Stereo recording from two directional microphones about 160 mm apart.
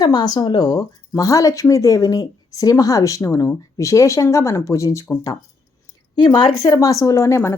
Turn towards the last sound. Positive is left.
turn(degrees=15)  # may be behind; listen again after turning